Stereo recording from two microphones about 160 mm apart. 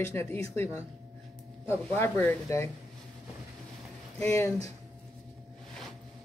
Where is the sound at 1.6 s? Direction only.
15° left (ahead or behind).